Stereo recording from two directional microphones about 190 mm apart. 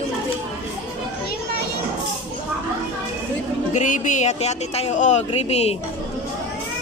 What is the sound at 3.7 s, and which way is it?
Speech, 40° left (ahead or behind).